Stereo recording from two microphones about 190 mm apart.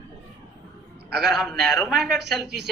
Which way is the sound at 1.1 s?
Centre (ahead or behind).